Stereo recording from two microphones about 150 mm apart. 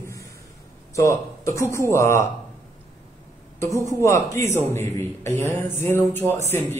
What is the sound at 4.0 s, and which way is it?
A man's voice, 20° left (ahead or behind).